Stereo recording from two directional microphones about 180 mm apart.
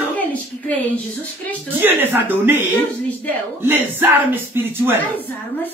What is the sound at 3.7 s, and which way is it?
Speech, 10° right (ahead or behind).